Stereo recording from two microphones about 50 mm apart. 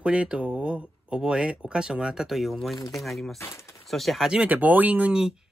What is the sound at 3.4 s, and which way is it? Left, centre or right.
Speech, left.